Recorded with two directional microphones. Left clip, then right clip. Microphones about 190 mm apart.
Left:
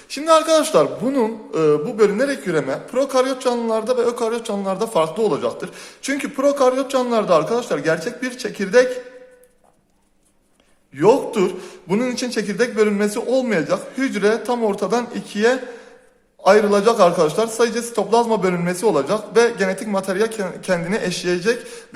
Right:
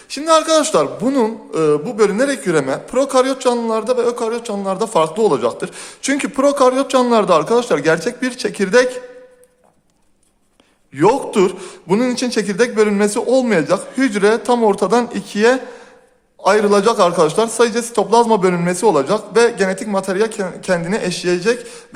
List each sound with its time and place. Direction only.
0.1 s a man's voice: 15° right (ahead or behind)
10.9 s a man's voice: 25° right (ahead or behind)